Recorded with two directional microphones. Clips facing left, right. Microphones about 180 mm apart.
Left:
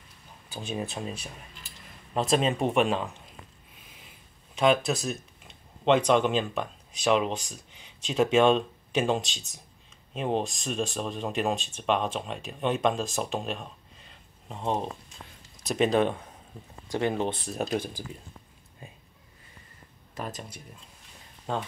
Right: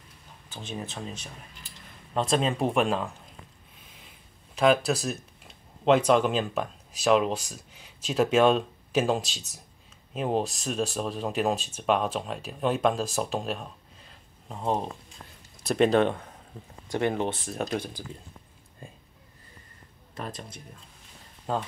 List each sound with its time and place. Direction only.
0.5 s speech: 15° left (ahead or behind)
4.6 s speech: centre (ahead or behind)
15.7 s speech: 15° left (ahead or behind)
21.5 s speech: 5° right (ahead or behind)